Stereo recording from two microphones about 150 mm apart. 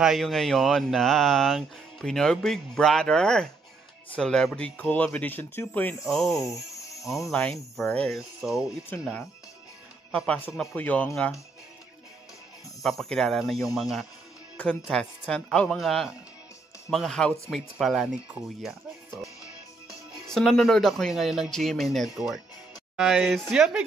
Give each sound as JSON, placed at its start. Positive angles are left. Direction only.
{"t": 0.0, "sound": "speech", "side_deg": 0}
{"t": 6.0, "sound": "speech", "side_deg": 0}
{"t": 6.5, "sound": "music", "side_deg": 20}
{"t": 7.2, "sound": "speech", "side_deg": 5}
{"t": 12.8, "sound": "speech", "side_deg": 0}
{"t": 19.9, "sound": "speech", "side_deg": 0}